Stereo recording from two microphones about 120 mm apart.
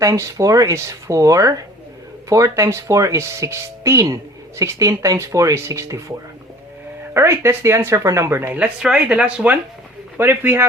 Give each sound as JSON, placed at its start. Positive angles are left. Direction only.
{"t": 0.0, "sound": "speech", "side_deg": -30}